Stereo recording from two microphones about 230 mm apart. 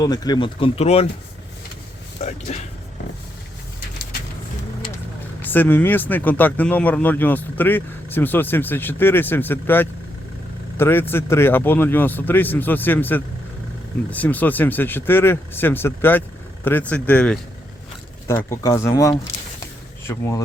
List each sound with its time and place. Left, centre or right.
0.0 s speech: centre
2.2 s a sound: left
5.4 s speech: centre